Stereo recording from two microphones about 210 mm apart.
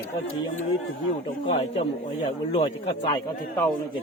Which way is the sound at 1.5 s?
25° left (ahead or behind).